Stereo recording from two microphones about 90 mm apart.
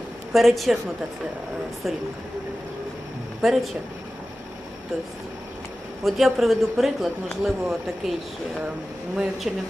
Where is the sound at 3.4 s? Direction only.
Centre (ahead or behind).